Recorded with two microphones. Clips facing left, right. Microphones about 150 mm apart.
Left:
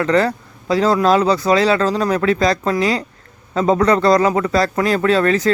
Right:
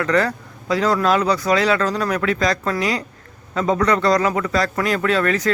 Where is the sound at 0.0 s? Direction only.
30° left (ahead or behind).